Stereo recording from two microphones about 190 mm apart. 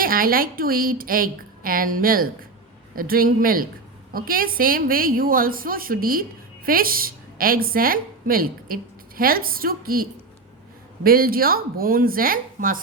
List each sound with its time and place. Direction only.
0.0 s a woman's voice: 50° right (ahead or behind)